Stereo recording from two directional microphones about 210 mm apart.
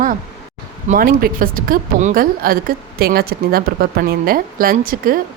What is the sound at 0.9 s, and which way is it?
Speech, 45° right (ahead or behind).